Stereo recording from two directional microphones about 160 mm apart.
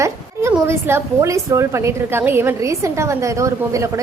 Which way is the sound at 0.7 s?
15° right (ahead or behind).